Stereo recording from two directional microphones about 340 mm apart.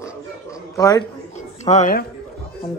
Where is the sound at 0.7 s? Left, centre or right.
Centre.